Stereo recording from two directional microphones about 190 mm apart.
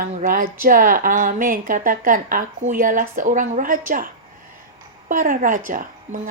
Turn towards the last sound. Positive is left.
turn(degrees=-45)  # may be behind; listen again after turning